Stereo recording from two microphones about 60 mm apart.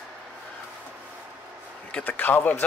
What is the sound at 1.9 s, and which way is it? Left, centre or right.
Speech, left.